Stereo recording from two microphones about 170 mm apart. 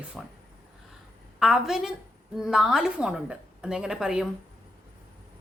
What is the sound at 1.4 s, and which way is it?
Speech, 5° right (ahead or behind).